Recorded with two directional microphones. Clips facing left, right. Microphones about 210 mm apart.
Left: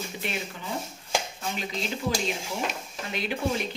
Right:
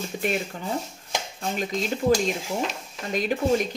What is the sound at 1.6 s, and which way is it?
A woman's voice, 45° right (ahead or behind).